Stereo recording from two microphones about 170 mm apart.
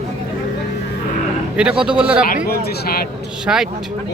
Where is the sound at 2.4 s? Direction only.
65° left (ahead or behind).